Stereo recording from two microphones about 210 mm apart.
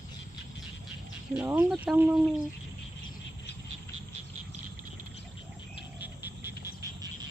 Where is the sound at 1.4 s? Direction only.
10° right (ahead or behind).